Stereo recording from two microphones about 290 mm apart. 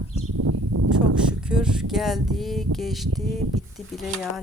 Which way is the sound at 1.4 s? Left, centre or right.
Centre.